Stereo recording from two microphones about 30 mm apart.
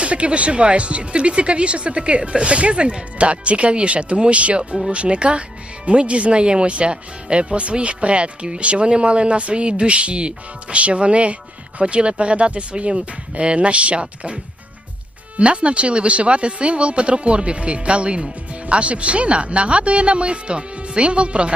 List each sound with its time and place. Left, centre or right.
0.0 s speech: right
15.4 s speech: right